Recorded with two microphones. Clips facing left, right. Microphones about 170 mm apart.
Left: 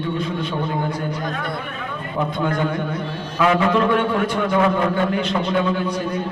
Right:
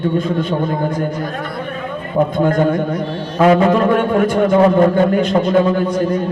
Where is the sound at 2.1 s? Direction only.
45° right (ahead or behind).